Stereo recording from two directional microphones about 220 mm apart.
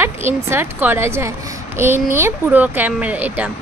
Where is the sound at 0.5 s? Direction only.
10° right (ahead or behind).